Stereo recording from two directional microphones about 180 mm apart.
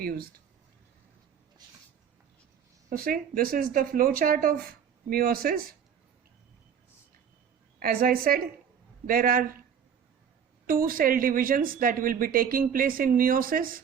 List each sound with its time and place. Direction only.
0.0 s speech: 55° right (ahead or behind)
2.9 s speech: 55° right (ahead or behind)
7.8 s speech: 55° right (ahead or behind)
10.7 s speech: 50° right (ahead or behind)